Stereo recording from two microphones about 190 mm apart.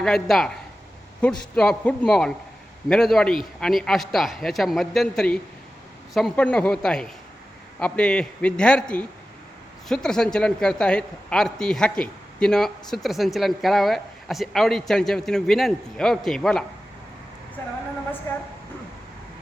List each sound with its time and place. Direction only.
0.0 s a man's voice: centre (ahead or behind)
18.3 s a woman's voice: 15° left (ahead or behind)